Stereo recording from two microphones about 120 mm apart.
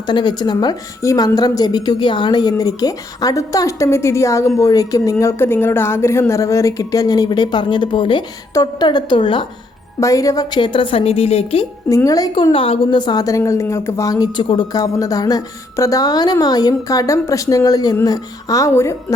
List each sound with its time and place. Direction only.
0.1 s a woman's voice: 40° left (ahead or behind)
10.0 s a woman's voice: 25° left (ahead or behind); by 11.6 s 55° left (ahead or behind)
11.9 s speech: 30° left (ahead or behind)
12.3 s a woman's voice: 45° left (ahead or behind); by 18.9 s 25° left (ahead or behind)